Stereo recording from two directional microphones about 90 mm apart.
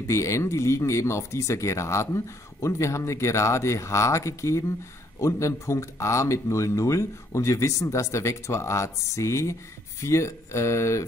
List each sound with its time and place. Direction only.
0.0 s speech: 35° left (ahead or behind)